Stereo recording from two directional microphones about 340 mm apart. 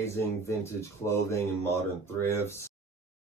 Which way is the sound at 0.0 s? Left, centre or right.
Centre.